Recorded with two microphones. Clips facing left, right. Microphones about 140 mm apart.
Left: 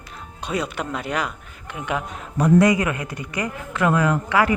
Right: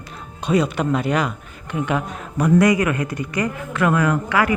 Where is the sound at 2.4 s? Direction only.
25° left (ahead or behind).